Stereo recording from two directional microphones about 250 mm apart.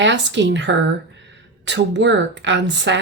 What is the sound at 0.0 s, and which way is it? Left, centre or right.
Speech, right.